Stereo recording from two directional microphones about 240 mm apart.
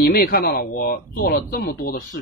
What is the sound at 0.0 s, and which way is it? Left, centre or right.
Speech, left.